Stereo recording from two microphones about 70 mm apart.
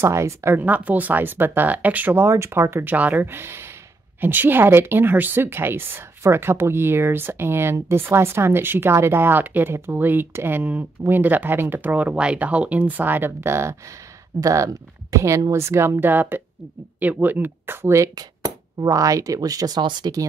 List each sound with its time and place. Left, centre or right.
0.0 s speech: right
0.6 s speech: right
2.1 s speech: right
14.4 s speech: right
18.1 s speech: right